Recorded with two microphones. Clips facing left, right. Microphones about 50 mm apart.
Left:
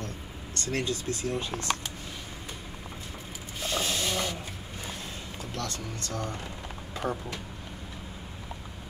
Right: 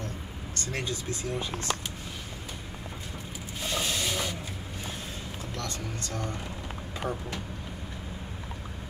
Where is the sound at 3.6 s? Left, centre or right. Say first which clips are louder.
Left 1 dB; centre.